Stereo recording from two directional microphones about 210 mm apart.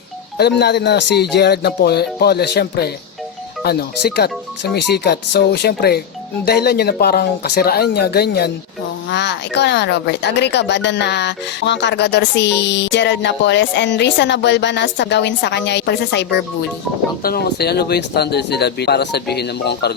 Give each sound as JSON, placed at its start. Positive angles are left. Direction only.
{"t": 0.3, "sound": "speech", "side_deg": 50}